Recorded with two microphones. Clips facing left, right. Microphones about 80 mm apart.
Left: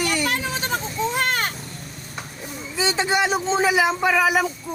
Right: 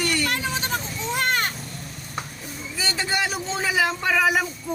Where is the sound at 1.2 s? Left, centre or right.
Left.